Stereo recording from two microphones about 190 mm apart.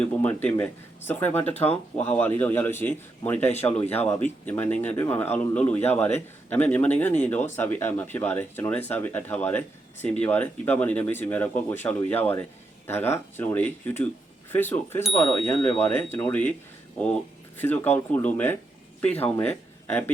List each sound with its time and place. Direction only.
0.0 s speech: 5° left (ahead or behind)
17.6 s speech: 10° left (ahead or behind)